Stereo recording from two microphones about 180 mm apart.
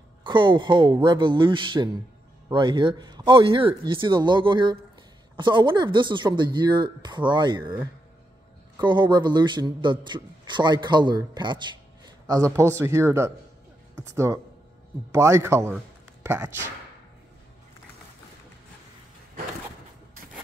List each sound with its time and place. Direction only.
0.2 s a man's voice: 25° right (ahead or behind)
8.7 s a man's voice: 25° right (ahead or behind)